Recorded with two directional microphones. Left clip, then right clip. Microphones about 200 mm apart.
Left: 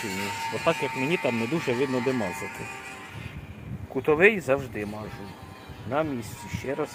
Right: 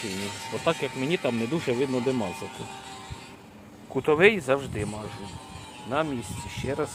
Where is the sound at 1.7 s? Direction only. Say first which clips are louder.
Even; 45° right (ahead or behind).